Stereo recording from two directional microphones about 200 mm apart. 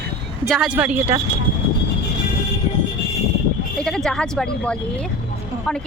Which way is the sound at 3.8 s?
Centre (ahead or behind).